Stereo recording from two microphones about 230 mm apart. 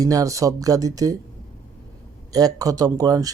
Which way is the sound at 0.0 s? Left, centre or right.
Centre.